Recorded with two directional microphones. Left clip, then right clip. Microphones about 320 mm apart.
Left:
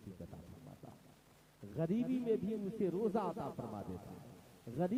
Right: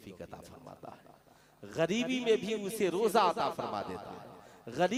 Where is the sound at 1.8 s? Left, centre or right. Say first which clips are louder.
Right 7 dB; centre.